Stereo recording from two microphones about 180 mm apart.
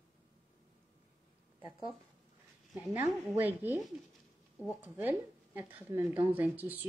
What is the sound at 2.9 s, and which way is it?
Speech, 10° right (ahead or behind).